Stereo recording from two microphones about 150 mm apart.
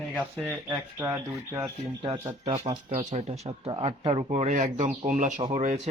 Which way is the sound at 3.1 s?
45° right (ahead or behind).